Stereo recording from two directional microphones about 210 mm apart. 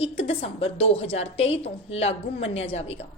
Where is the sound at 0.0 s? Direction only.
30° left (ahead or behind).